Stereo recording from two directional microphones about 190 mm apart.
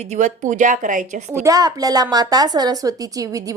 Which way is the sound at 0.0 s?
35° right (ahead or behind).